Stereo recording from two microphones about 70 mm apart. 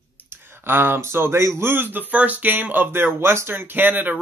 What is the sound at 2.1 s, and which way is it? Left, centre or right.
Speech, right.